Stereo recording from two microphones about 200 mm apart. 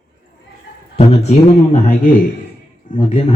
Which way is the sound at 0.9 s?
30° left (ahead or behind).